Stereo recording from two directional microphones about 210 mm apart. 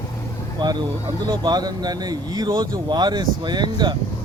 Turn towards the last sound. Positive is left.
turn(degrees=-20)  # may be behind; listen again after turning